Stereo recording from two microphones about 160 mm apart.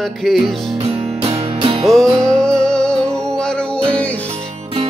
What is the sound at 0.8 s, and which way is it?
Music, 35° right (ahead or behind).